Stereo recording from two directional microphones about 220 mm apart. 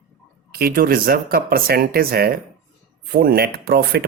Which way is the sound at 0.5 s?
40° right (ahead or behind).